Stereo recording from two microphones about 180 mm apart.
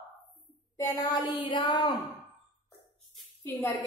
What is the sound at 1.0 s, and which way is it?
A woman's voice, 25° left (ahead or behind).